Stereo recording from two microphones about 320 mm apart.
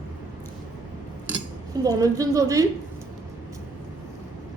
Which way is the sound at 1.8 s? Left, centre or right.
Centre.